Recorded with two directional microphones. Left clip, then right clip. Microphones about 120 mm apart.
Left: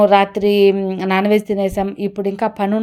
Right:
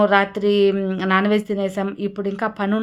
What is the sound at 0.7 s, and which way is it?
Speech, 10° left (ahead or behind).